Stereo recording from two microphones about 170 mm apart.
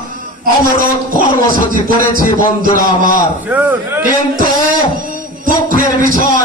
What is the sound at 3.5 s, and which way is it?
Speech, 10° right (ahead or behind).